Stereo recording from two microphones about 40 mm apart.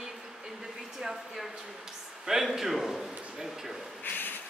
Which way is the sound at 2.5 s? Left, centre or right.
Centre.